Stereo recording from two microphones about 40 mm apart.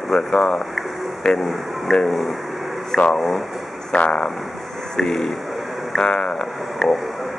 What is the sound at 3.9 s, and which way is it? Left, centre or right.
Speech, centre.